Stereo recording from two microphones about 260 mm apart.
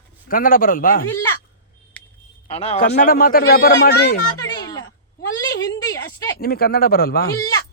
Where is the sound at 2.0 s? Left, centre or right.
Centre.